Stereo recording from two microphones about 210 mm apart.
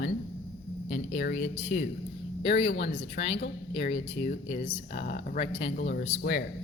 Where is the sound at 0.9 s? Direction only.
35° left (ahead or behind).